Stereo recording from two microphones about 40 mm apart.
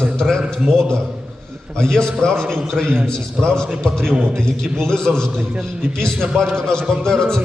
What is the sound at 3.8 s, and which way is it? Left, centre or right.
A man's voice, centre.